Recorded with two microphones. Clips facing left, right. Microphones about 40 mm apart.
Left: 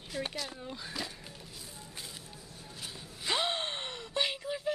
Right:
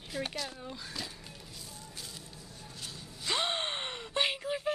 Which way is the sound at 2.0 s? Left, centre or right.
Centre.